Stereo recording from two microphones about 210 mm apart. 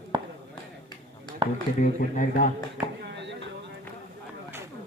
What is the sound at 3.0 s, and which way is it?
Chop, 55° right (ahead or behind).